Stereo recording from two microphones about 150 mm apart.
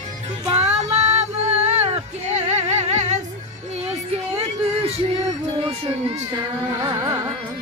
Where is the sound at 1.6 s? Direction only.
45° right (ahead or behind).